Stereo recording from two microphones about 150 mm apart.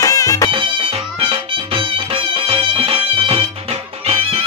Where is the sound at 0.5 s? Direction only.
35° right (ahead or behind).